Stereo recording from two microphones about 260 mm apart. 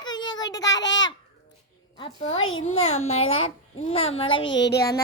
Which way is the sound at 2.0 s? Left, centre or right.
Left.